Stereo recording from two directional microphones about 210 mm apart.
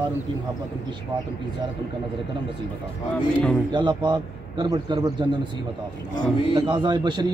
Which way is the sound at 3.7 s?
20° right (ahead or behind).